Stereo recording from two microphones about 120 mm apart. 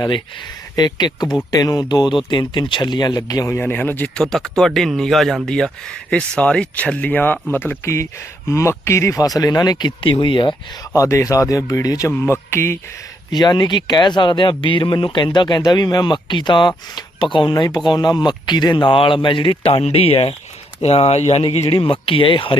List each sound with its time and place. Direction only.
0.8 s speech: 35° left (ahead or behind)
3.5 s speech: 15° left (ahead or behind)
4.2 s speech: 5° left (ahead or behind); by 10.5 s 40° left (ahead or behind)
10.9 s speech: 25° left (ahead or behind)
13.3 s speech: 35° left (ahead or behind)
19.8 s speech: 55° left (ahead or behind)